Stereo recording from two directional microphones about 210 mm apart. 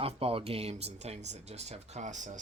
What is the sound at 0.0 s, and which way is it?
Speech, 25° right (ahead or behind).